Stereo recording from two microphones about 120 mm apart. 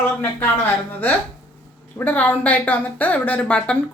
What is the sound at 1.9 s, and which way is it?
Speech, 15° left (ahead or behind).